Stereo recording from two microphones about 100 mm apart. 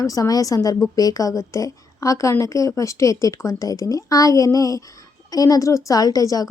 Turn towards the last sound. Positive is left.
turn(degrees=40)  # may be behind; listen again after turning